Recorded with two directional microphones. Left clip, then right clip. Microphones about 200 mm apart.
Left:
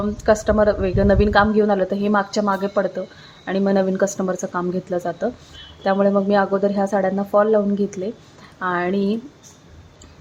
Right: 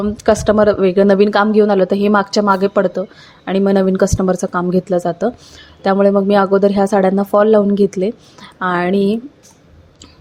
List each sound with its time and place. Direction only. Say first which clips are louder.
0.0 s speech: right 4 dB; 25° right (ahead or behind)